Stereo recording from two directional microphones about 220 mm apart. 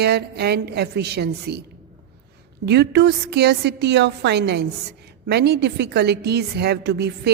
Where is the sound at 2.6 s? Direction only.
50° right (ahead or behind).